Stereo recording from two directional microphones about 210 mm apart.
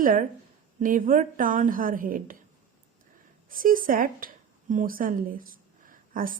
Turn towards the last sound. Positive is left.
turn(degrees=-40)  # may be behind; listen again after turning